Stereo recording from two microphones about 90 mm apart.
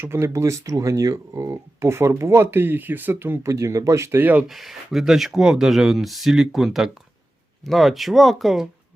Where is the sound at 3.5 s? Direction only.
35° right (ahead or behind).